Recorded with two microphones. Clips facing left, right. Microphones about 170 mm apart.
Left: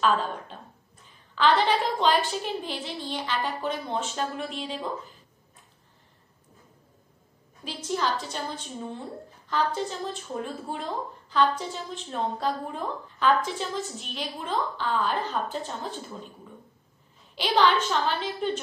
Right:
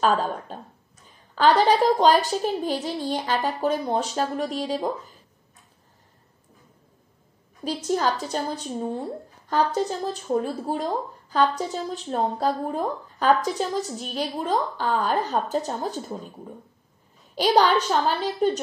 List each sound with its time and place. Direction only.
0.0 s speech: 40° right (ahead or behind)
7.6 s speech: 45° right (ahead or behind)
17.4 s speech: 40° right (ahead or behind)